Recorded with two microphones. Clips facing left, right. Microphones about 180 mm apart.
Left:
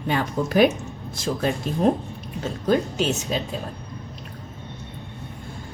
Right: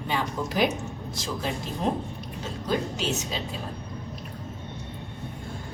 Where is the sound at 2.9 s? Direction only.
50° left (ahead or behind).